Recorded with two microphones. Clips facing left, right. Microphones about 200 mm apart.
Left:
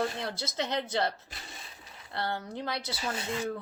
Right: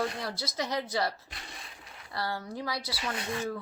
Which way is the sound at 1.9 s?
25° left (ahead or behind).